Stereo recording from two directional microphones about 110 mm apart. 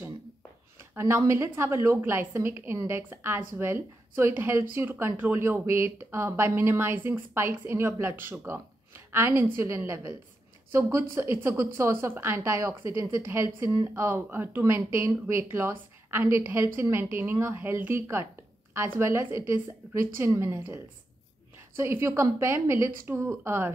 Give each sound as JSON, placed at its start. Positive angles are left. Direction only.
{"t": 0.7, "sound": "a woman's voice", "side_deg": -20}